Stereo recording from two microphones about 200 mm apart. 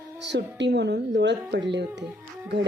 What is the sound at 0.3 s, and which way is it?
A woman's voice, 60° right (ahead or behind).